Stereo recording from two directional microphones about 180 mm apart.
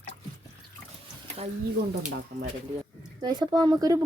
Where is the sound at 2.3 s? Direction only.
55° right (ahead or behind).